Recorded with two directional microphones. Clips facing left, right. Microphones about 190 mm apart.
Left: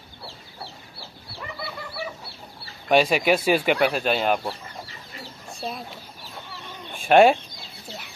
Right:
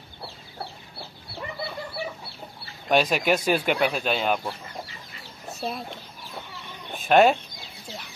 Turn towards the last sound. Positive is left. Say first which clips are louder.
# left 2 dB
turn(degrees=10)  # may be behind; listen again after turning